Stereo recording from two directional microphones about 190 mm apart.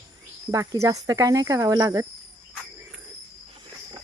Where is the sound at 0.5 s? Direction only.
20° right (ahead or behind).